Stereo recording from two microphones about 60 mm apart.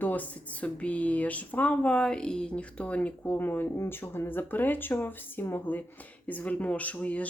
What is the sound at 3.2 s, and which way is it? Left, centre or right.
Speech, left.